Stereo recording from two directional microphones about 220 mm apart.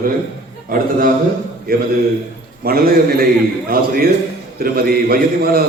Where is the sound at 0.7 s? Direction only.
40° right (ahead or behind).